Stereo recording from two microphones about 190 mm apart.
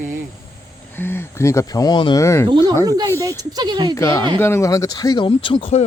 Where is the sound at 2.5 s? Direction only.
25° right (ahead or behind).